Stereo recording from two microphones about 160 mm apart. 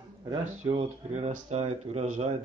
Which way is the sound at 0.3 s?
35° right (ahead or behind).